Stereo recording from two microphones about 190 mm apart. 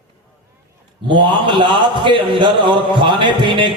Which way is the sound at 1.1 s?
25° right (ahead or behind).